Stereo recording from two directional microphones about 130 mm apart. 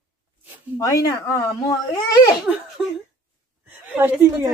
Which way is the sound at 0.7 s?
25° left (ahead or behind).